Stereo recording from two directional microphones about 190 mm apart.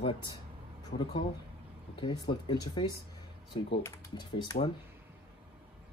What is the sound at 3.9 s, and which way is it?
Speech, 20° left (ahead or behind).